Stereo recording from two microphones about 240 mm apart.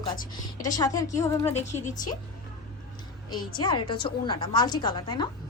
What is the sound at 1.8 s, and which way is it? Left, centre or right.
Speech, left.